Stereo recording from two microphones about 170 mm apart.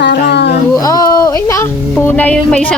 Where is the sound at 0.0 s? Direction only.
80° left.